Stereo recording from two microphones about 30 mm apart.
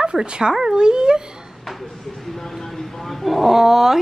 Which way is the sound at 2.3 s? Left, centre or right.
Centre.